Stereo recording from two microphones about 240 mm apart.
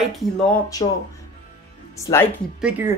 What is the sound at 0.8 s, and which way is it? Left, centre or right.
Speech, left.